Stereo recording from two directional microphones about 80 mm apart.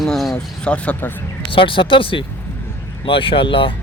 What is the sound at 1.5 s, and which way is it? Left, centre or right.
Speech, left.